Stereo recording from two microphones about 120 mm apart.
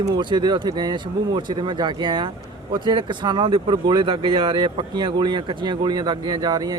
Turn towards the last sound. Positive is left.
turn(degrees=-35)  # may be behind; listen again after turning